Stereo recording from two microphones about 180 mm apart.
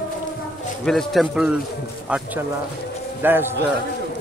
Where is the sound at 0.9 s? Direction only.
Centre (ahead or behind).